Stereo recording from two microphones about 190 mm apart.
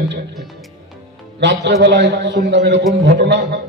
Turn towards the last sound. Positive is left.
turn(degrees=-65)  # may be behind; listen again after turning